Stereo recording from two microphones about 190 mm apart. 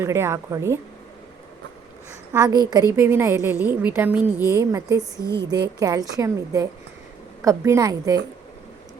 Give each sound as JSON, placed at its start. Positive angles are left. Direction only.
{"t": 0.0, "sound": "a woman's voice", "side_deg": -15}
{"t": 2.3, "sound": "a woman's voice", "side_deg": -20}